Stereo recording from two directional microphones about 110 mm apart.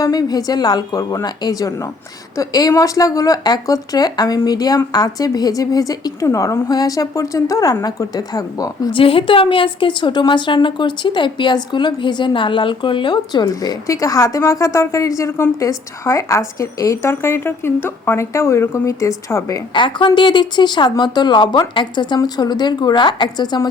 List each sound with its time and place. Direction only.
0.0 s a woman's voice: 35° left (ahead or behind)
8.9 s a woman's voice: 55° left (ahead or behind); by 19.6 s 30° left (ahead or behind)
19.7 s a woman's voice: 45° left (ahead or behind)